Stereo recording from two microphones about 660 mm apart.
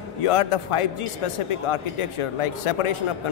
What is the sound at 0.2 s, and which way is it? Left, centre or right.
A man's voice, left.